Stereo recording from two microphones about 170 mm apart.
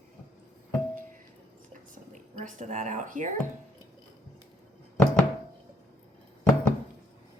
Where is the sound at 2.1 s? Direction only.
45° right (ahead or behind).